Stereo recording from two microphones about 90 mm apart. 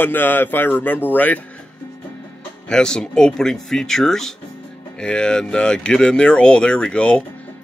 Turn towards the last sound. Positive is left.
turn(degrees=10)  # may be behind; listen again after turning